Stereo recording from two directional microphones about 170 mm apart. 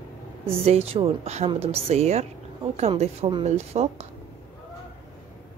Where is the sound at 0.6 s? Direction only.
35° right (ahead or behind).